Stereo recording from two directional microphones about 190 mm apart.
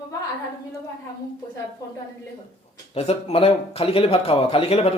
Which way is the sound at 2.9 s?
30° left (ahead or behind).